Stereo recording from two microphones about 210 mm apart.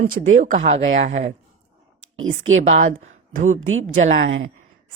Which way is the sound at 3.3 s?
35° right (ahead or behind).